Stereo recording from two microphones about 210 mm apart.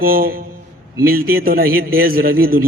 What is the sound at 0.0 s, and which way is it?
A man's voice, 45° right (ahead or behind).